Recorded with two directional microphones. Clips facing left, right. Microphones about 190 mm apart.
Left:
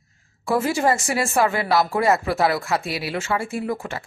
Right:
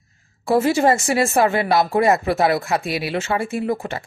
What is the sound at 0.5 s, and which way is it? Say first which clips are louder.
Speech: right 4 dB; 25° right (ahead or behind).